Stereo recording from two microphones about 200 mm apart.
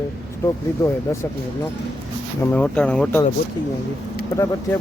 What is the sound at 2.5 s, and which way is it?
Speech, 5° left (ahead or behind).